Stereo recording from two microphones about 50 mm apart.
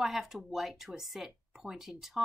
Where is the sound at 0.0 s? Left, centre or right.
Centre.